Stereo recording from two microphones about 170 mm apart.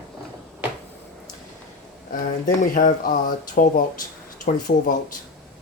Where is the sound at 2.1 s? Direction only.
50° left (ahead or behind).